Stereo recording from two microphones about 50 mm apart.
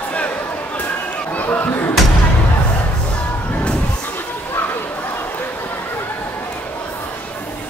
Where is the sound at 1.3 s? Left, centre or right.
Left.